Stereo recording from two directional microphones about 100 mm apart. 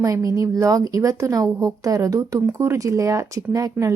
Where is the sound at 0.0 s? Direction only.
35° right (ahead or behind).